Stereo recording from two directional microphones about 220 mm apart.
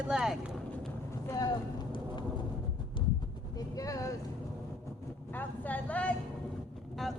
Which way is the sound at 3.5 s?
15° left (ahead or behind).